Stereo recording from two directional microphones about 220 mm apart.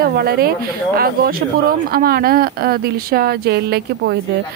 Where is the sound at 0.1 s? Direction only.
45° right (ahead or behind).